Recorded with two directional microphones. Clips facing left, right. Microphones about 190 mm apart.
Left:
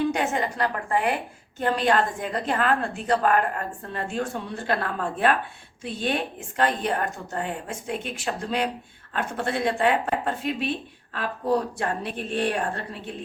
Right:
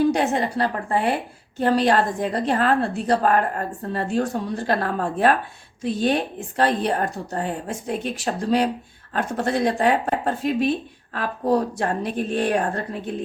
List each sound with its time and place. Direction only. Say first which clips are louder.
0.0 s a woman's voice: right 5 dB; 35° right (ahead or behind)